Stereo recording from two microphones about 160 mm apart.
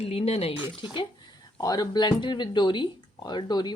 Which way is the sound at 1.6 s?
25° left (ahead or behind).